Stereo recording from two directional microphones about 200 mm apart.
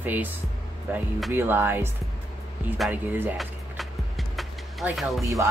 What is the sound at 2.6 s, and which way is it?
Music, 5° right (ahead or behind).